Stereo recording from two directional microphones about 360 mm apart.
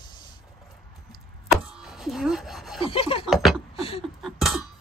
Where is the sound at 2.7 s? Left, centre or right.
Centre.